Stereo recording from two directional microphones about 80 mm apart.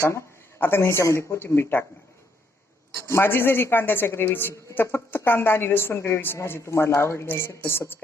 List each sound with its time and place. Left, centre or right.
0.1 s speech: left
3.1 s speech: left